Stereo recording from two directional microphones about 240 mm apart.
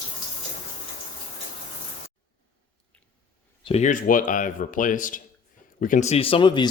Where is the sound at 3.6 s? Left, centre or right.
Left.